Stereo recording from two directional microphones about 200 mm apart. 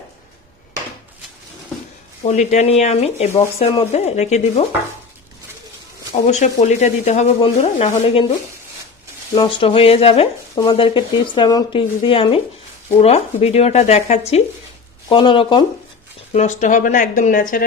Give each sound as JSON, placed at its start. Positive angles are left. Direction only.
{"t": 2.2, "sound": "speech", "side_deg": 35}
{"t": 6.2, "sound": "speech", "side_deg": 35}
{"t": 9.3, "sound": "speech", "side_deg": 25}
{"t": 16.3, "sound": "speech", "side_deg": 35}